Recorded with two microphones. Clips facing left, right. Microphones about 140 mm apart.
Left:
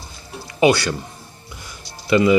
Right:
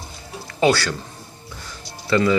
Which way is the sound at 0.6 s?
20° left (ahead or behind).